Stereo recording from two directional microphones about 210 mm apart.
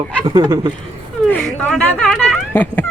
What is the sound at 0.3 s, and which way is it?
Speech, 20° right (ahead or behind).